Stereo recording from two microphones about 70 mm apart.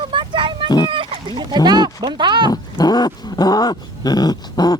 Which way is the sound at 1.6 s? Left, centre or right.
Right.